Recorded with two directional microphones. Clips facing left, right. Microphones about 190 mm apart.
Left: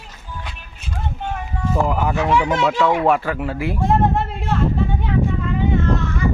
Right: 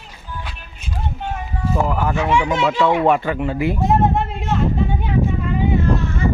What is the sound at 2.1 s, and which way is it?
Speech, centre (ahead or behind).